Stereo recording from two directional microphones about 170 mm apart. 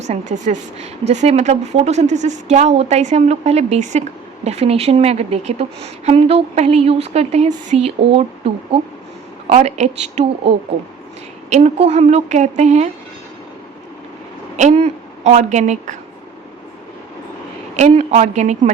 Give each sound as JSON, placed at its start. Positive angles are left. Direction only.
{"t": 0.0, "sound": "a woman's voice", "side_deg": -45}
{"t": 14.5, "sound": "speech", "side_deg": -40}
{"t": 17.7, "sound": "a woman's voice", "side_deg": -40}